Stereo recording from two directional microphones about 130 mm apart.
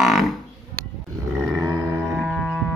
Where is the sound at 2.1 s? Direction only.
Centre (ahead or behind).